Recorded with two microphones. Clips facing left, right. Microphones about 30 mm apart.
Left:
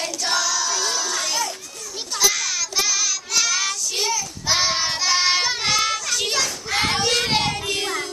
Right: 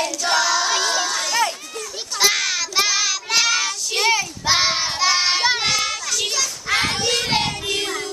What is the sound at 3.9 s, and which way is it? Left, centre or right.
Child singing, right.